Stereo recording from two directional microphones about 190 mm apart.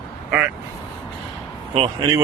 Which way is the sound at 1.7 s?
30° right (ahead or behind).